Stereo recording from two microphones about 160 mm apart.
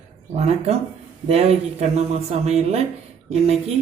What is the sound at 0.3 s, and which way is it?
Speech, 40° right (ahead or behind).